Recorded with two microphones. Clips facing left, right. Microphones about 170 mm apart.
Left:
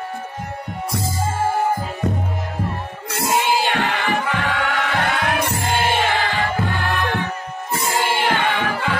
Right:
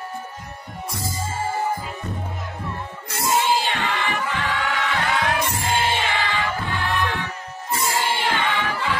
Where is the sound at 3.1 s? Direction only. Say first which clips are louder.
Left 1 dB; 60° left (ahead or behind).